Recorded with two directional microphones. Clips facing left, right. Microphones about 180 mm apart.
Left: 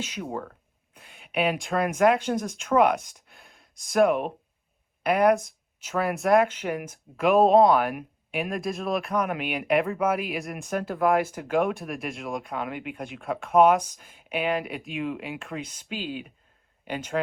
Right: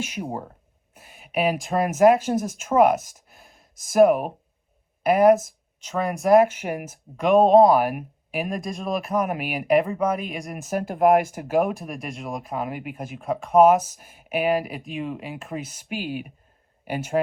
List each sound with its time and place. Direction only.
0.3 s speech: 30° right (ahead or behind)
0.9 s speech: 5° right (ahead or behind)
7.2 s speech: centre (ahead or behind)